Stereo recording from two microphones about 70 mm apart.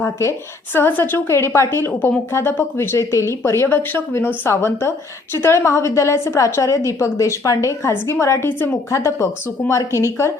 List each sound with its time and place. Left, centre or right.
0.0 s a woman's voice: left
0.7 s a woman's voice: left
1.3 s a woman's voice: left
8.9 s a woman's voice: left